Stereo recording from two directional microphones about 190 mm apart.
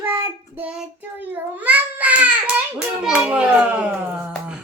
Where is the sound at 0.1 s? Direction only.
10° right (ahead or behind).